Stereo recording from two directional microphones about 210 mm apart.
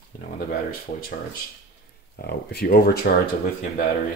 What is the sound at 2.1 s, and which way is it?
Speech, 45° left (ahead or behind).